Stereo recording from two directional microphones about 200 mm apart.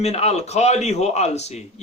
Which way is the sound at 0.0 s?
30° left (ahead or behind).